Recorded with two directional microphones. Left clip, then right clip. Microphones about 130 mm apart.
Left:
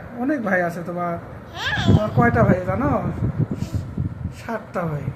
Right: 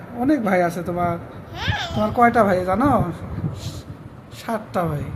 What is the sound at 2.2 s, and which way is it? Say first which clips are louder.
Speech: right 4 dB; 15° right (ahead or behind).